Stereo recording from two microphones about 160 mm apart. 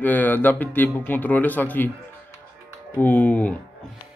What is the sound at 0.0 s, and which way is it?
Speech, 10° left (ahead or behind).